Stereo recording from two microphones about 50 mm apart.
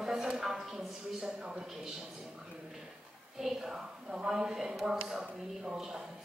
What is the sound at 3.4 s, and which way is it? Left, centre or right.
A woman's voice, centre.